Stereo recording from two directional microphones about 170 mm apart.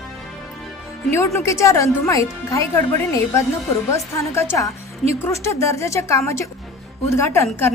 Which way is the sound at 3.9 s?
15° left (ahead or behind).